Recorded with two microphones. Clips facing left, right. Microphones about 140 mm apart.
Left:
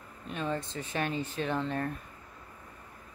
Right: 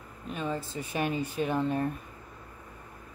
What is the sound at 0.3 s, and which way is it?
Speech, 5° right (ahead or behind).